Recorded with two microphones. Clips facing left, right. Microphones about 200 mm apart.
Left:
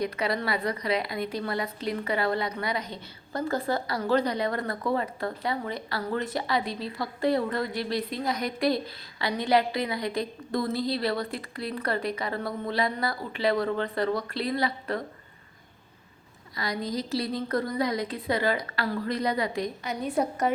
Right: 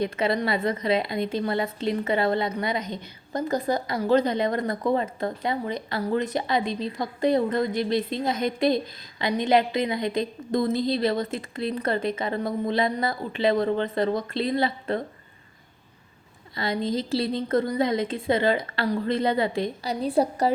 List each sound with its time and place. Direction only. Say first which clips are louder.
0.0 s a woman's voice: right 4 dB; 25° right (ahead or behind)
16.6 s a woman's voice: right 4 dB; 25° right (ahead or behind)